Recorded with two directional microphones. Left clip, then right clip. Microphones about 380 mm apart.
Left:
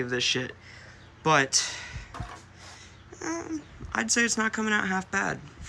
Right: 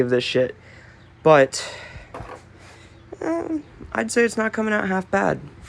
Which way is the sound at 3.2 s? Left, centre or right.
Centre.